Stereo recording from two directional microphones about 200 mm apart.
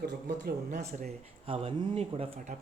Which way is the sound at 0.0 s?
55° right (ahead or behind).